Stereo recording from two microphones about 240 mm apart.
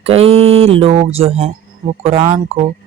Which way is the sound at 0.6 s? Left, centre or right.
Right.